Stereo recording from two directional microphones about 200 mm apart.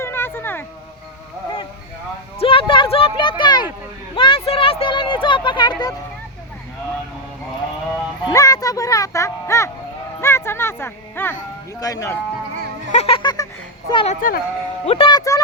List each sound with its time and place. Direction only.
0.0 s a sound: 10° left (ahead or behind)
2.4 s a sound: 25° left (ahead or behind)
8.3 s music: 15° left (ahead or behind)
11.8 s speech: 15° left (ahead or behind)
12.9 s speech: 30° left (ahead or behind)
14.2 s speech: 45° left (ahead or behind)
14.8 s speech: 25° left (ahead or behind)